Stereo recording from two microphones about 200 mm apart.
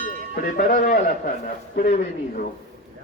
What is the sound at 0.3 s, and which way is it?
Speech, 50° left (ahead or behind).